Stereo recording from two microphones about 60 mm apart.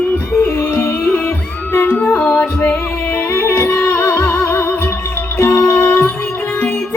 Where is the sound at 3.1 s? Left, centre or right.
Left.